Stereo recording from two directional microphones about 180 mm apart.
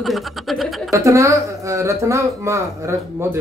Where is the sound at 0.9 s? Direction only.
15° right (ahead or behind).